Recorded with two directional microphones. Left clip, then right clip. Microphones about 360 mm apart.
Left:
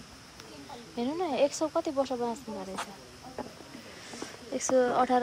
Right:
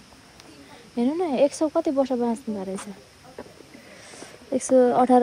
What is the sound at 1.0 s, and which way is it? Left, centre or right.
Speech, centre.